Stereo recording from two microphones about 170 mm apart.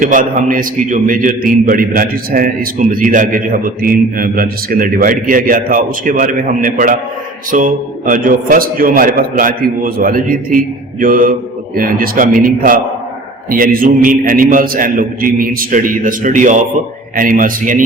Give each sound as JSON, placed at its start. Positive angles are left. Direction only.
{"t": 0.0, "sound": "a man's voice", "side_deg": -50}